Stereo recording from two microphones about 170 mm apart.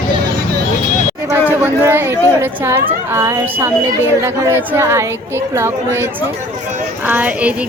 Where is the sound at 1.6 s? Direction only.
10° right (ahead or behind).